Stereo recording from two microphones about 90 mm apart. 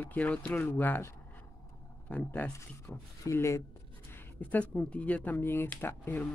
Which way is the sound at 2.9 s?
30° left (ahead or behind).